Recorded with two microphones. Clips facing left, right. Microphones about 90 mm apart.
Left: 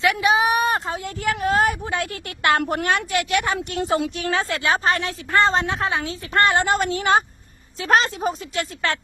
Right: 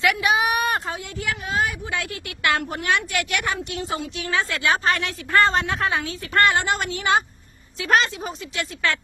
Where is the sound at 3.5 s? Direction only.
55° left (ahead or behind).